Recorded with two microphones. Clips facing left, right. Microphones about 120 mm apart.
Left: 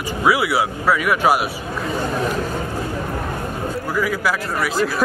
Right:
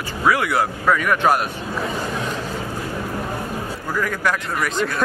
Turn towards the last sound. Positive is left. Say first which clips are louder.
# left 2 dB
turn(degrees=5)  # may be behind; listen again after turning